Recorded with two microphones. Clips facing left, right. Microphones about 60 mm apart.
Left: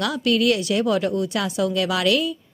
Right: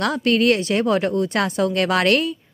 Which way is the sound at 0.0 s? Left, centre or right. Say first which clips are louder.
Right 2 dB; right.